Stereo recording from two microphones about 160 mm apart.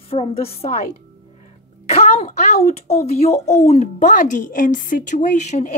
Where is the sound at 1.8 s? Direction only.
40° left (ahead or behind).